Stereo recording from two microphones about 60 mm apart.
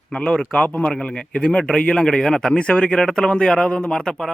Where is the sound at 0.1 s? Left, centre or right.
Centre.